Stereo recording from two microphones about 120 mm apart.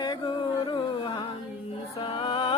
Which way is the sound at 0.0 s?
40° left (ahead or behind).